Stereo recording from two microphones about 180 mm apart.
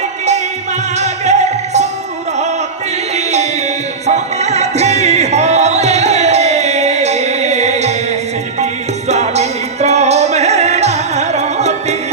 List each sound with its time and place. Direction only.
0.9 s music: 40° right (ahead or behind)
4.0 s music: 40° right (ahead or behind)